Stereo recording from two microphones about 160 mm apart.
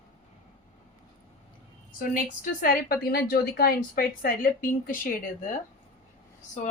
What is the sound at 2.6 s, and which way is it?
A woman's voice, 60° left (ahead or behind).